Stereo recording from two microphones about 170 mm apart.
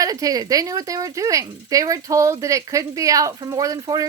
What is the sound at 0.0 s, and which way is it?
A woman's voice, 20° right (ahead or behind).